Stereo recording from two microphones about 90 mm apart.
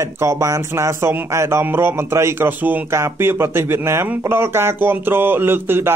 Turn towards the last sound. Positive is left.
turn(degrees=-25)  # may be behind; listen again after turning